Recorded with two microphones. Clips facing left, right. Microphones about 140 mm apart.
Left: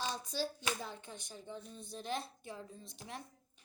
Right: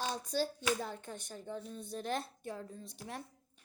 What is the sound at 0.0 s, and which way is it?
A woman's voice, 50° right (ahead or behind).